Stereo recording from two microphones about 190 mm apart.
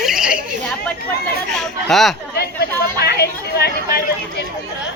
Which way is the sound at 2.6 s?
55° left (ahead or behind).